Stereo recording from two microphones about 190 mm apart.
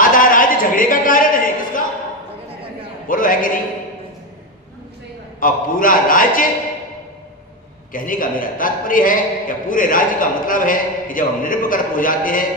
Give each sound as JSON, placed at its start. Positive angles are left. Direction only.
{"t": 0.0, "sound": "a sound", "side_deg": 45}
{"t": 3.1, "sound": "a man's voice", "side_deg": 45}
{"t": 5.4, "sound": "a man's voice", "side_deg": 45}
{"t": 7.9, "sound": "a man's voice", "side_deg": 45}